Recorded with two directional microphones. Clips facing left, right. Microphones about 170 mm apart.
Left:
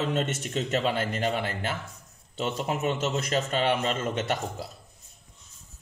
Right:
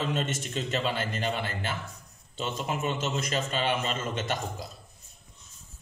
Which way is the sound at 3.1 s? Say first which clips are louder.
Left 3 dB; 55° left (ahead or behind).